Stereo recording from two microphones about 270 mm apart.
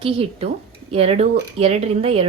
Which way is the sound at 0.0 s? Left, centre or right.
Right.